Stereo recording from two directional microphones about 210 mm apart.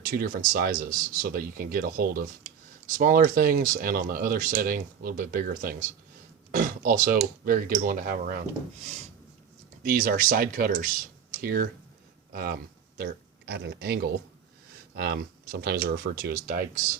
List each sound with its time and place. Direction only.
0.0 s speech: 45° right (ahead or behind)
9.8 s speech: 45° right (ahead or behind)